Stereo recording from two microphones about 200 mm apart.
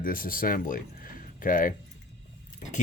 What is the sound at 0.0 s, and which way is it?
Speech, 45° left (ahead or behind).